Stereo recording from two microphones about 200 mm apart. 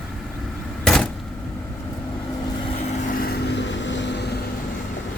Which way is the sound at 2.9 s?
40° left (ahead or behind).